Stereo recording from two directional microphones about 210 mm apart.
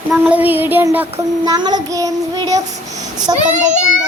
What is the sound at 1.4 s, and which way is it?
Child singing, 20° right (ahead or behind).